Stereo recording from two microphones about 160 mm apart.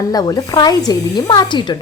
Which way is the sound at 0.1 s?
25° left (ahead or behind).